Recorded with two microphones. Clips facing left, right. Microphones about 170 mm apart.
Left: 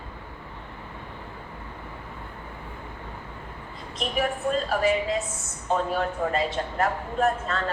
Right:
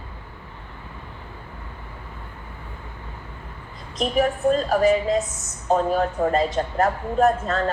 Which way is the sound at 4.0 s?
40° right (ahead or behind).